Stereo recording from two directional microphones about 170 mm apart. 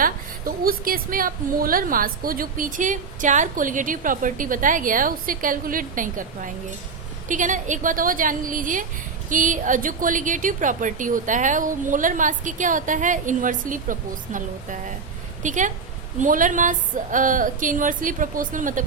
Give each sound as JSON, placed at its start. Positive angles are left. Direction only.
{"t": 0.0, "sound": "a woman's voice", "side_deg": -55}